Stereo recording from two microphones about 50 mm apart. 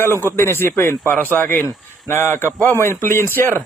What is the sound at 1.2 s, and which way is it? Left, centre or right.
Speech, left.